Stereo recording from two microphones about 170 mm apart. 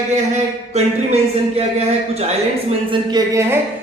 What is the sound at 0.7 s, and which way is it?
Speech, 40° right (ahead or behind).